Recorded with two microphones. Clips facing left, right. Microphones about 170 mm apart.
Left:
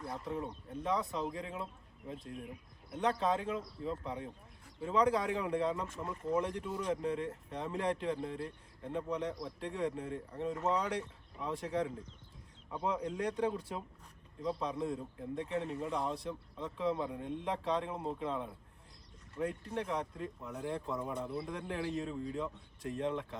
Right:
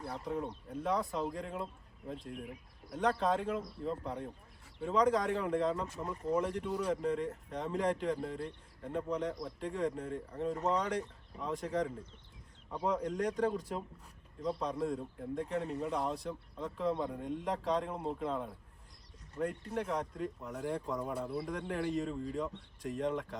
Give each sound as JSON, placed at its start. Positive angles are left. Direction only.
{"t": 0.0, "sound": "speech", "side_deg": 0}